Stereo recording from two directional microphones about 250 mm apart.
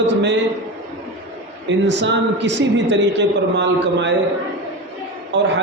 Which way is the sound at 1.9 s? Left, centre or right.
Right.